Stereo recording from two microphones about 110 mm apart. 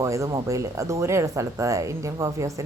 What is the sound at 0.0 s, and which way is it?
A woman's voice, 30° right (ahead or behind).